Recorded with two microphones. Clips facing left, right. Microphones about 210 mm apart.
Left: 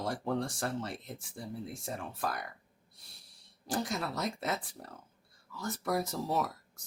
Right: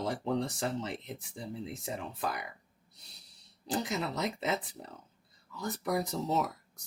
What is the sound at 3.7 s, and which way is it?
Speech, 20° right (ahead or behind).